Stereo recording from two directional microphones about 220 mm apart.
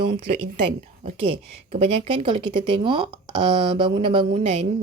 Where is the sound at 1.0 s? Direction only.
30° right (ahead or behind).